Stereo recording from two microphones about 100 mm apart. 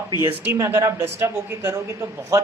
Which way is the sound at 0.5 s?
30° right (ahead or behind).